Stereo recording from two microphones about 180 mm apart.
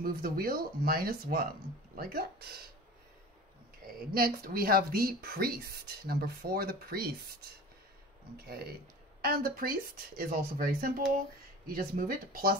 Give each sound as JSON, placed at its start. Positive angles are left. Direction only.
{"t": 0.0, "sound": "speech", "side_deg": -55}
{"t": 3.8, "sound": "speech", "side_deg": -55}
{"t": 9.2, "sound": "speech", "side_deg": -55}